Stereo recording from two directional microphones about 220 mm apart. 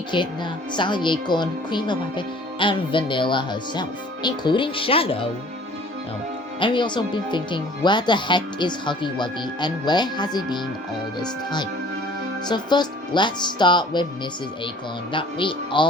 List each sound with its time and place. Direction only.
0.1 s speech: 20° left (ahead or behind)
6.6 s speech: 20° left (ahead or behind)
15.1 s speech: 20° left (ahead or behind)